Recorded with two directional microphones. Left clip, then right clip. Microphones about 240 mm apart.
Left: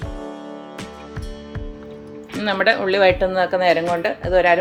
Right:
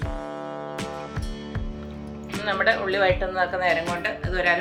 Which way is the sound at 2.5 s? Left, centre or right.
Left.